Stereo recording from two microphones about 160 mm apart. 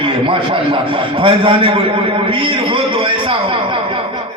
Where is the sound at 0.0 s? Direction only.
35° right (ahead or behind).